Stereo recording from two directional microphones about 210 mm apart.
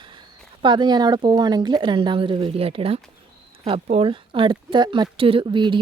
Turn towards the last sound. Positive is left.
turn(degrees=-20)  # may be behind; listen again after turning